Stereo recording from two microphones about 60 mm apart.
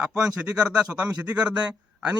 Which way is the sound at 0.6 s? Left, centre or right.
Centre.